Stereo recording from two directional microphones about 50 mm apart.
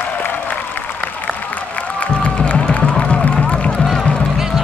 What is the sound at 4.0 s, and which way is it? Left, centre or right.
Music, left.